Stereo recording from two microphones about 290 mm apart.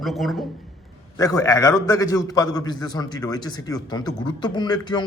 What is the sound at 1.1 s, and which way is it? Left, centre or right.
Speech, centre.